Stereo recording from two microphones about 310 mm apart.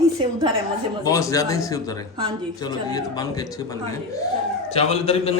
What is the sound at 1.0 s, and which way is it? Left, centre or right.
A man's voice, centre.